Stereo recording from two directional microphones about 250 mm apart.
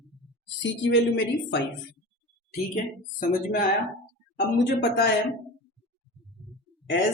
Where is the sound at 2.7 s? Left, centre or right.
Left.